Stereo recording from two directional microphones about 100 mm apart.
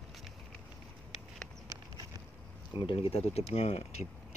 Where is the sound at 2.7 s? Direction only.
60° left (ahead or behind); by 4.0 s 90° left.